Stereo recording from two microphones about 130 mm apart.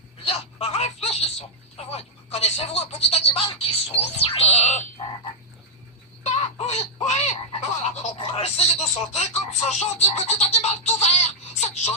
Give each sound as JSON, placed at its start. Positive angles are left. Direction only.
{"t": 0.3, "sound": "speech", "side_deg": 55}
{"t": 6.6, "sound": "speech", "side_deg": 55}
{"t": 8.1, "sound": "speech", "side_deg": 45}